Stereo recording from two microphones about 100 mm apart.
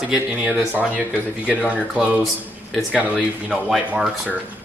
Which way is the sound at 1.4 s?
15° left (ahead or behind).